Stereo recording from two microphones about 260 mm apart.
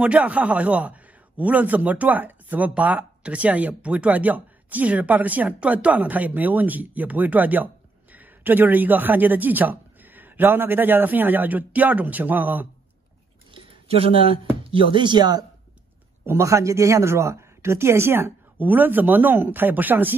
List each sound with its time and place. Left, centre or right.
0.0 s a man's voice: centre
13.5 s a sound: right
14.6 s a man's voice: centre